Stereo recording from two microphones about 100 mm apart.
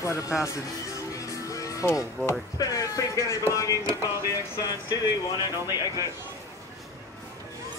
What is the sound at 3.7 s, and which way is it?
Music, 30° right (ahead or behind).